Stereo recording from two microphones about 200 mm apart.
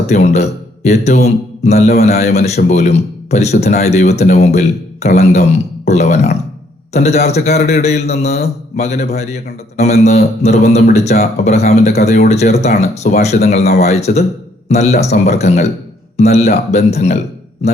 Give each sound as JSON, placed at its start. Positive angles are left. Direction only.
{"t": 0.1, "sound": "speech", "side_deg": 35}